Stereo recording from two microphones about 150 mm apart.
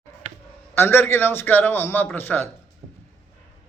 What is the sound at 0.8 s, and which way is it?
A man's voice, 15° left (ahead or behind).